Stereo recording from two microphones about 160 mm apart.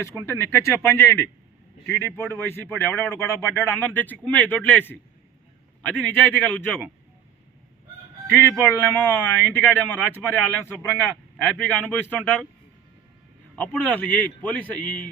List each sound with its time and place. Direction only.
0.3 s speech: 15° left (ahead or behind)
6.1 s speech: 15° left (ahead or behind)
8.4 s speech: 15° left (ahead or behind)
11.4 s speech: 5° left (ahead or behind)
13.6 s speech: 10° left (ahead or behind)